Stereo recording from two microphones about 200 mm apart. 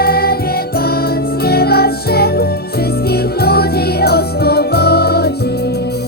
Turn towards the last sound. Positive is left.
turn(degrees=55)  # may be behind; listen again after turning